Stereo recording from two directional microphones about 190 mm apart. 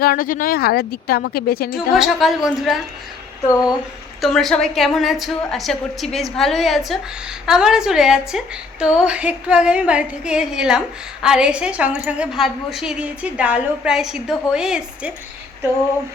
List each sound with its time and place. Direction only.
0.0 s speech: 50° left (ahead or behind)
1.9 s a woman's voice: centre (ahead or behind)
4.2 s a woman's voice: centre (ahead or behind)